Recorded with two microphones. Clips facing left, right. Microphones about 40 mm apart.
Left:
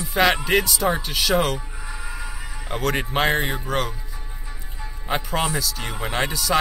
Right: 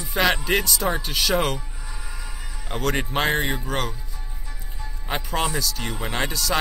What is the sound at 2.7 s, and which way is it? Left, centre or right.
Speech, centre.